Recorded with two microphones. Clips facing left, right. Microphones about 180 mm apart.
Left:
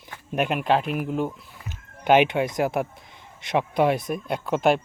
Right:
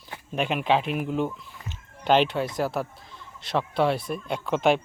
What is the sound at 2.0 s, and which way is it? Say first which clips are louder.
Speech: left 3 dB; 15° left (ahead or behind).